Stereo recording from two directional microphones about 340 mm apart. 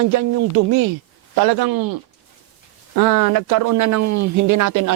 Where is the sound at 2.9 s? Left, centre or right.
Right.